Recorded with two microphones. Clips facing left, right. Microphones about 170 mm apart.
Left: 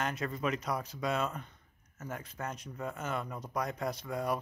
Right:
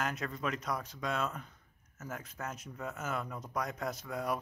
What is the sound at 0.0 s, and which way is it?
Speech, centre (ahead or behind).